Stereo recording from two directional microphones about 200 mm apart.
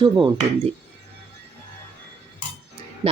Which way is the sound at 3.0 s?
30° right (ahead or behind).